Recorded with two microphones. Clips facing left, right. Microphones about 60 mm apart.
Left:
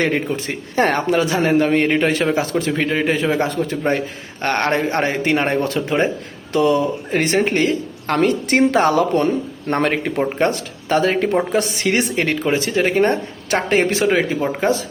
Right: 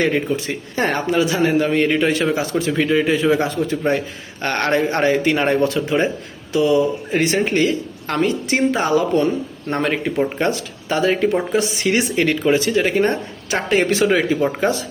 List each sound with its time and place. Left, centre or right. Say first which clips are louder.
0.3 s a man's voice: left 3 dB; left
6.5 s speech: even; left
7.3 s a man's voice: left 1 dB; left
8.2 s speech: left 2 dB; left
10.3 s a man's voice: left 2 dB; left